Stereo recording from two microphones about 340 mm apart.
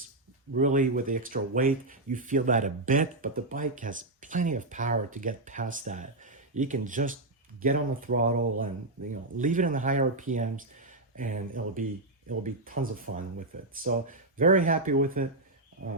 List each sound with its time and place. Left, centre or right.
0.5 s speech: right